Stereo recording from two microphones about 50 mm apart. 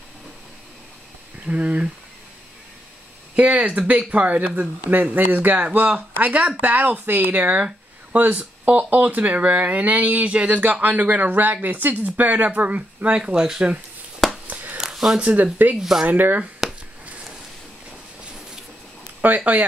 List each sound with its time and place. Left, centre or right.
1.4 s speech: right
3.3 s speech: right
10.6 s speech: right; by 13.7 s centre
14.5 s a sound: right
14.8 s a sound: centre
15.4 s speech: right
15.7 s speech: centre
16.1 s speech: right
19.2 s speech: right